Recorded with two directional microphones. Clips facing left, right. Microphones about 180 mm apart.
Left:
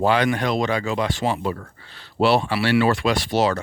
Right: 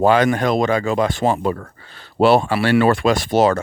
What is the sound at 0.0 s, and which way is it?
Speech, 45° right (ahead or behind).